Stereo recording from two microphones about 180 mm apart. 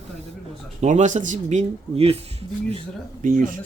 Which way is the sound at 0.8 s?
40° right (ahead or behind).